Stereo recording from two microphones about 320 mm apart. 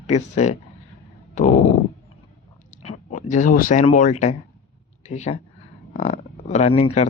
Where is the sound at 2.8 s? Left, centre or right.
Centre.